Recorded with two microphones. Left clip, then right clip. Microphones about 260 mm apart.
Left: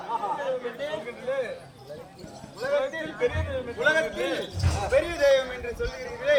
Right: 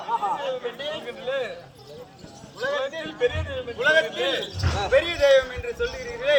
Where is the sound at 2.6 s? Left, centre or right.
Centre.